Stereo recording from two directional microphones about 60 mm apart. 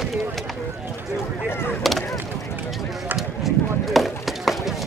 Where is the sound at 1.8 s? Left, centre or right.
Centre.